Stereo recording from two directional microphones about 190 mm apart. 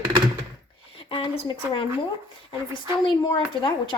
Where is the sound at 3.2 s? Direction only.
25° left (ahead or behind).